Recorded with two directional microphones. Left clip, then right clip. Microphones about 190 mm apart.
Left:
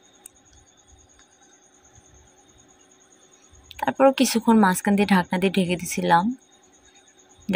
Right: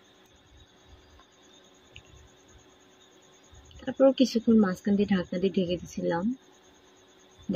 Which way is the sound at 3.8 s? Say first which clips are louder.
Left 4 dB; 45° left (ahead or behind).